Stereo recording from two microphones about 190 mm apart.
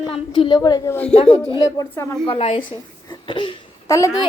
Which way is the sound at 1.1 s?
30° left (ahead or behind).